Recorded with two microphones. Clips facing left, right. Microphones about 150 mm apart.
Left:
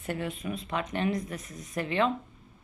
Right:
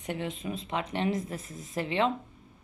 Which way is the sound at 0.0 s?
20° right (ahead or behind).